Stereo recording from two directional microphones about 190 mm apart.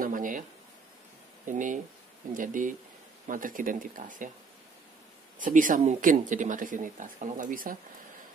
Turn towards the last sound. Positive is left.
turn(degrees=-45)  # may be behind; listen again after turning